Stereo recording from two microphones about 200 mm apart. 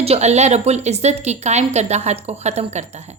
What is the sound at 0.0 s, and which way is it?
Speech, 30° right (ahead or behind).